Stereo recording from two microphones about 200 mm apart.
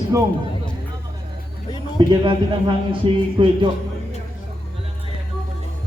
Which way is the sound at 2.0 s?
25° right (ahead or behind).